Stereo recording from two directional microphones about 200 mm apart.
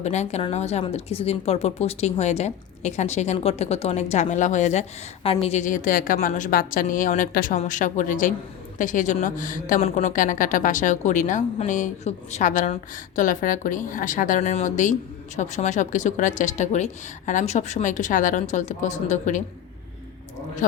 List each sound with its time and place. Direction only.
0.0 s speech: 35° left (ahead or behind)
20.6 s speech: 40° left (ahead or behind)